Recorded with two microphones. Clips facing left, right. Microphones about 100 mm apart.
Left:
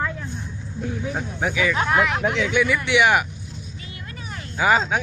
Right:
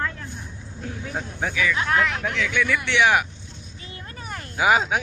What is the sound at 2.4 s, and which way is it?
Speech, 15° left (ahead or behind).